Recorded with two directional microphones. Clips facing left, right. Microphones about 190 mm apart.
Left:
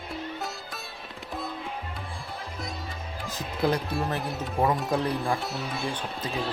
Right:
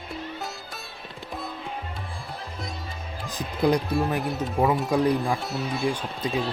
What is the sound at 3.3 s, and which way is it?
Music, 15° right (ahead or behind).